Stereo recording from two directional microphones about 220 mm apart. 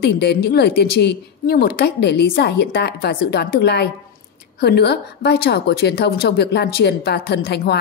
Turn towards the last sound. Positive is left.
turn(degrees=50)  # may be behind; listen again after turning